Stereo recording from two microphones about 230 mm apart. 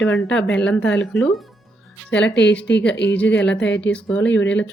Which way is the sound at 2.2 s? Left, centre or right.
Left.